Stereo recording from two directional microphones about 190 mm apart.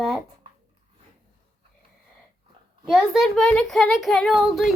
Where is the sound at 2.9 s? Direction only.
Centre (ahead or behind).